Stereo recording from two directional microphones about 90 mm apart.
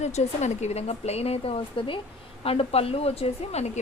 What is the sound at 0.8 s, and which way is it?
A woman's voice, 90° left.